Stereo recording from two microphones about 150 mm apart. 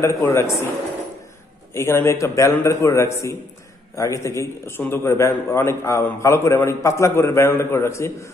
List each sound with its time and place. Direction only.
0.0 s a man's voice: 20° left (ahead or behind)
1.7 s a man's voice: 15° left (ahead or behind)